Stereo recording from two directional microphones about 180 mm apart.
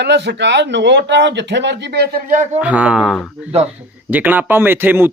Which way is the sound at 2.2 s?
45° right (ahead or behind).